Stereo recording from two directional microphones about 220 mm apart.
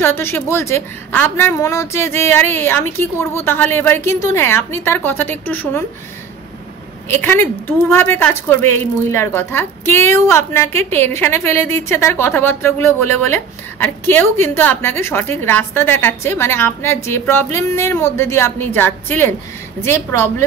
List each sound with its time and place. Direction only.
0.0 s a woman's voice: 10° left (ahead or behind)
7.1 s a woman's voice: 10° left (ahead or behind)